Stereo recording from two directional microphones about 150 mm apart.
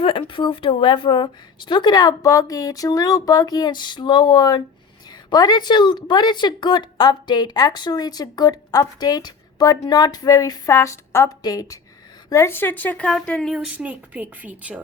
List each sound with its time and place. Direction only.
0.0 s a woman's voice: 35° left (ahead or behind); by 14.8 s 10° right (ahead or behind)